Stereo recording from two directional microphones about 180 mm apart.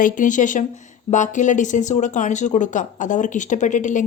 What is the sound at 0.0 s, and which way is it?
Speech, 45° left (ahead or behind).